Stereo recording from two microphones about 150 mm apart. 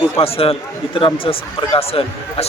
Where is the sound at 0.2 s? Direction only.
40° left (ahead or behind).